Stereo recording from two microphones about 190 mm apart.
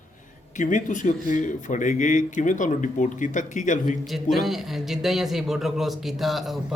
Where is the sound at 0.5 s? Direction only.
40° left (ahead or behind).